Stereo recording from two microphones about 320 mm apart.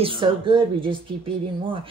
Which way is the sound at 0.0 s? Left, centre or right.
Centre.